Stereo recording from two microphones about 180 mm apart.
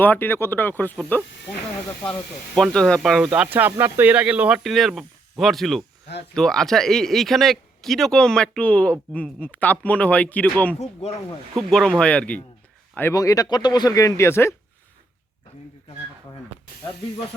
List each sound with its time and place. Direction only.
0.0 s speech: 10° left (ahead or behind)
2.7 s speech: 5° left (ahead or behind)